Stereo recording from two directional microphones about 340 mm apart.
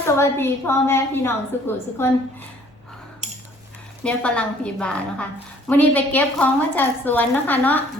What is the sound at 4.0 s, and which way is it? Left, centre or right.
A woman's voice, centre.